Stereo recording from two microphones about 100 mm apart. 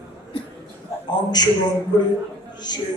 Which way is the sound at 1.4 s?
40° left (ahead or behind).